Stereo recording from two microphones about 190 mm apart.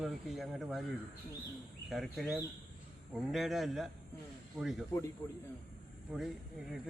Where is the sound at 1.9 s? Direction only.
Centre (ahead or behind).